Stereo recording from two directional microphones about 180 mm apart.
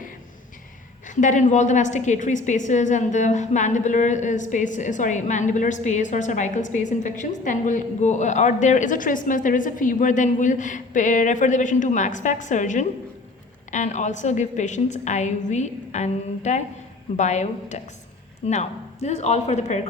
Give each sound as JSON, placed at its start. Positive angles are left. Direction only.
{"t": 1.1, "sound": "a woman's voice", "side_deg": 45}